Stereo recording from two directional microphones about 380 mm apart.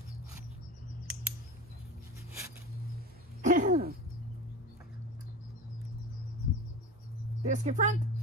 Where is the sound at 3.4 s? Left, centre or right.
Centre.